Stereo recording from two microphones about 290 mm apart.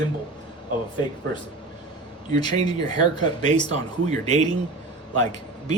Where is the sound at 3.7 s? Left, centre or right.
Right.